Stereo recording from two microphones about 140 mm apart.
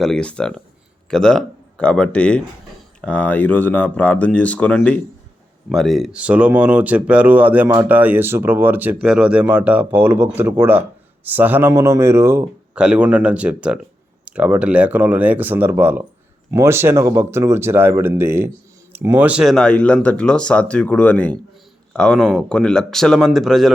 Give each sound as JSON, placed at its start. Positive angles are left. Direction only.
{"t": 0.0, "sound": "speech", "side_deg": 5}
{"t": 12.7, "sound": "speech", "side_deg": -5}